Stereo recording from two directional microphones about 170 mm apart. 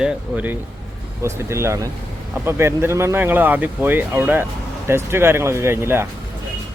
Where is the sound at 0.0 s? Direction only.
10° right (ahead or behind).